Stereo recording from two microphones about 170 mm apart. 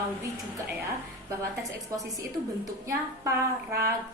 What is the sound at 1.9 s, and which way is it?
A woman's voice, 20° right (ahead or behind).